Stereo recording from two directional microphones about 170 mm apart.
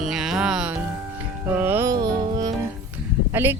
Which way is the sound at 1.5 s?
10° right (ahead or behind).